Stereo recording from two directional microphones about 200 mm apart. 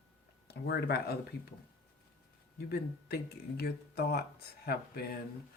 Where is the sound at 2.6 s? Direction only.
50° left (ahead or behind).